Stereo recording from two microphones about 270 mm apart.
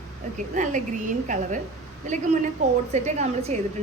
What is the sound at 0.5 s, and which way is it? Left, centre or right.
Speech, right.